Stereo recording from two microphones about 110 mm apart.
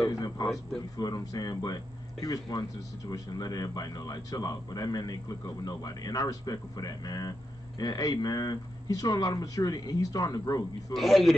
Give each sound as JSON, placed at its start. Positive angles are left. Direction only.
{"t": 0.1, "sound": "speech", "side_deg": 35}
{"t": 10.9, "sound": "a man's voice", "side_deg": 0}